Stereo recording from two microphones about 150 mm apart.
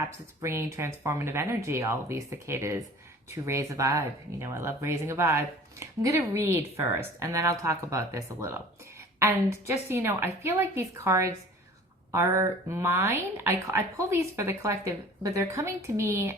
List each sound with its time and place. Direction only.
0.0 s a woman's voice: 20° right (ahead or behind)